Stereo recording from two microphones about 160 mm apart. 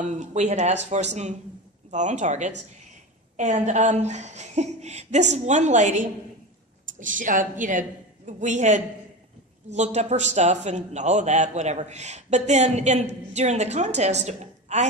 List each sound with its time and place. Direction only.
0.0 s a man's voice: 50° right (ahead or behind)